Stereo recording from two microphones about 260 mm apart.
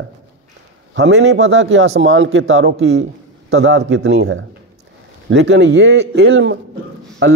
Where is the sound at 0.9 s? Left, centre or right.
Right.